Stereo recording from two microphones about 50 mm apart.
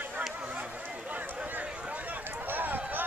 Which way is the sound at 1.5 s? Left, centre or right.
Right.